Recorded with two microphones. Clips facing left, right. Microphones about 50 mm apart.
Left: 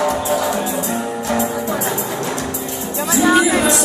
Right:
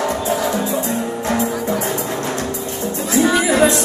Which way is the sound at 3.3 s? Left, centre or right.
Left.